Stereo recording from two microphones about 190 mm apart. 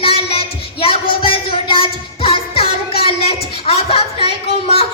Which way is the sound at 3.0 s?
30° left (ahead or behind).